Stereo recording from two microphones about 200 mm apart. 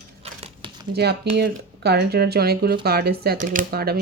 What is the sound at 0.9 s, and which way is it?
Speech, 55° right (ahead or behind).